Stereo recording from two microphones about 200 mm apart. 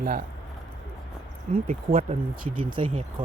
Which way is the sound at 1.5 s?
30° right (ahead or behind).